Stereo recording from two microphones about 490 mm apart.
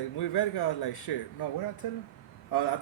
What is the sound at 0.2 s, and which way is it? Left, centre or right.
Speech, left.